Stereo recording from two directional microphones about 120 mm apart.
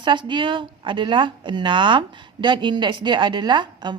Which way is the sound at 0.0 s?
40° right (ahead or behind).